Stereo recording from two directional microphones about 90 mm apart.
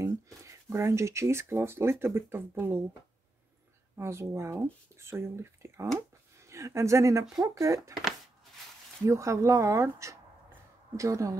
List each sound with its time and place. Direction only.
0.0 s speech: 35° right (ahead or behind)
3.9 s speech: 30° right (ahead or behind)
9.0 s speech: 35° right (ahead or behind)